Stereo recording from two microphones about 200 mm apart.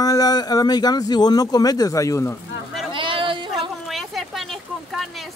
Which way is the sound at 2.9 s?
25° right (ahead or behind).